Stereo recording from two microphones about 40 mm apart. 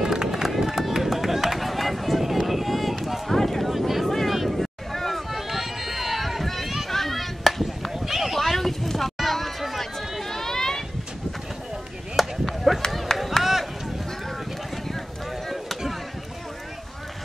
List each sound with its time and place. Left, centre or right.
0.0 s run: centre
4.3 s boat: centre
5.5 s run: centre
6.9 s chop: centre
8.4 s a sound: centre
10.2 s a sound: centre
12.2 s chop: centre
12.7 s run: centre
13.4 s a sound: centre
15.4 s chop: centre